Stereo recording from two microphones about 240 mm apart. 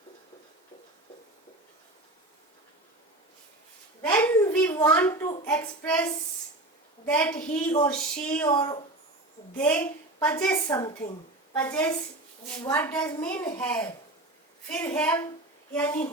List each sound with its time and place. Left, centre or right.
4.0 s a child's voice: centre
8.4 s speech: centre
9.6 s a woman's voice: centre
14.9 s a woman's voice: centre